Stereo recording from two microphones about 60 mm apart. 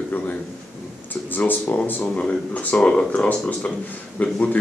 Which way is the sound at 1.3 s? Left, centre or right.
Left.